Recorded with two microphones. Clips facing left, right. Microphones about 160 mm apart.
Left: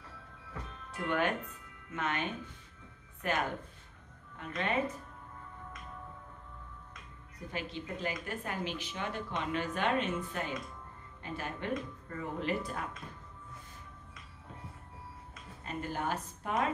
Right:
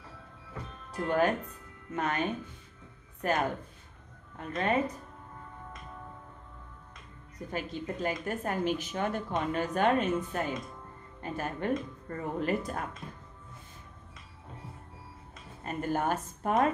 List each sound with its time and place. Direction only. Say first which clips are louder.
0.9 s speech: right 5 dB; 40° right (ahead or behind)
7.3 s speech: right 4 dB; 45° right (ahead or behind)
15.6 s a woman's voice: right 6 dB; 50° right (ahead or behind)